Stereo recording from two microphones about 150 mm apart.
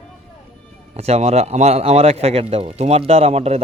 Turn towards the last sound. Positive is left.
turn(degrees=-45)  # may be behind; listen again after turning